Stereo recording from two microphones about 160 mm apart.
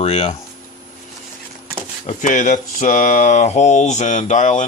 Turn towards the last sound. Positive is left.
turn(degrees=50)  # may be behind; listen again after turning